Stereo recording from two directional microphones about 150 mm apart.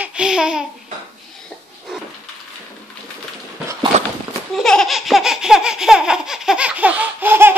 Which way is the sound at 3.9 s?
50° right (ahead or behind).